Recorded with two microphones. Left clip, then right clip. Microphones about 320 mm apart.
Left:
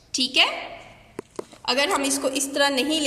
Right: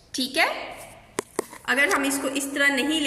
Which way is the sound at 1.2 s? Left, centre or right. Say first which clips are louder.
Right 7 dB; right.